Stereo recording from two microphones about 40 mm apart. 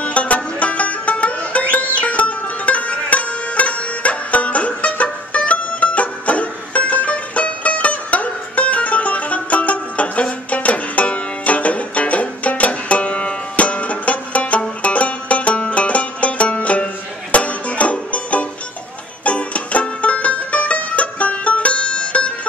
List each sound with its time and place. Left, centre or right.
0.0 s music: left